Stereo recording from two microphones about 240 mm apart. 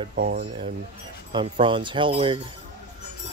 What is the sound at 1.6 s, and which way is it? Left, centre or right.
Speech, centre.